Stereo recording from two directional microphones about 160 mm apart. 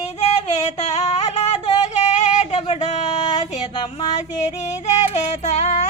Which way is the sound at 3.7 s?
30° left (ahead or behind).